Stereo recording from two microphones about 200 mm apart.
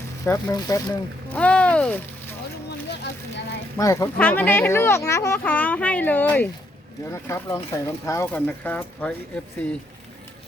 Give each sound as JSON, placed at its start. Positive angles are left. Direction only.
{"t": 0.3, "sound": "speech", "side_deg": 15}
{"t": 1.3, "sound": "speech", "side_deg": 5}
{"t": 2.6, "sound": "a sound", "side_deg": 60}
{"t": 3.8, "sound": "speech", "side_deg": 15}